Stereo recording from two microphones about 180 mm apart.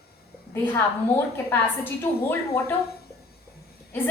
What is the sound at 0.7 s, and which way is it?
A woman's voice, 15° left (ahead or behind).